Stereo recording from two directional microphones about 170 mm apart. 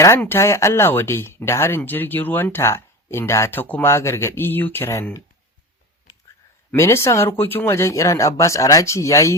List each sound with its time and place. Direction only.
0.0 s speech: 15° left (ahead or behind)
6.7 s speech: 15° left (ahead or behind)